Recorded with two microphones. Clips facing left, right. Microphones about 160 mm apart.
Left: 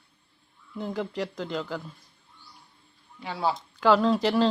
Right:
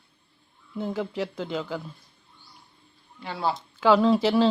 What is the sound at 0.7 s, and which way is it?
Speech, 5° right (ahead or behind).